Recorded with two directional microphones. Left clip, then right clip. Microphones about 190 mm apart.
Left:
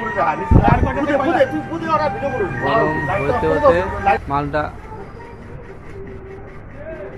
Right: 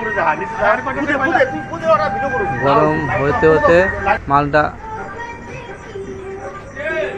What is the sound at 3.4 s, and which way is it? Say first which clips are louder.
Speech: right 4 dB; 25° right (ahead or behind).